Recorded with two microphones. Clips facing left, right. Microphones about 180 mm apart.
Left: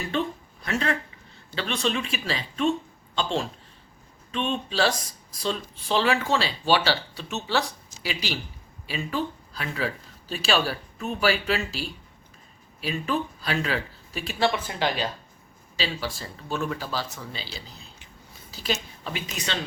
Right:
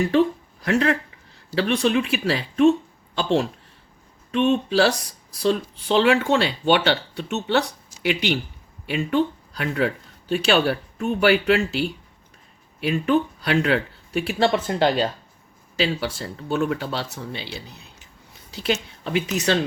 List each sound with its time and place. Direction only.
0.6 s speech: 65° right (ahead or behind)
14.4 s speech: 45° right (ahead or behind)
16.0 s speech: 70° right (ahead or behind)